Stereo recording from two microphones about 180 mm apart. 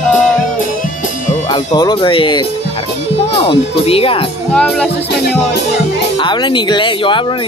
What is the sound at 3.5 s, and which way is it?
Speech, 30° left (ahead or behind).